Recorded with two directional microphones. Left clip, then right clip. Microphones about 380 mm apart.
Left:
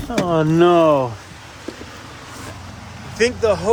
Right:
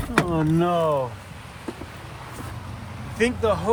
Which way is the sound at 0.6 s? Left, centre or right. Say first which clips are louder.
Left 10 dB; left.